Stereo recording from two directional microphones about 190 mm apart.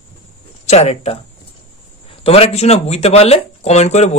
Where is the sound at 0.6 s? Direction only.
35° left (ahead or behind).